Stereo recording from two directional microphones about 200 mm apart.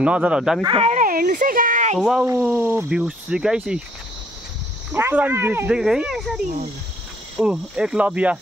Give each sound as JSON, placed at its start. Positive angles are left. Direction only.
{"t": 0.0, "sound": "speech", "side_deg": -5}
{"t": 0.7, "sound": "a sound", "side_deg": -35}
{"t": 2.0, "sound": "speech", "side_deg": 0}
{"t": 4.9, "sound": "speech", "side_deg": -10}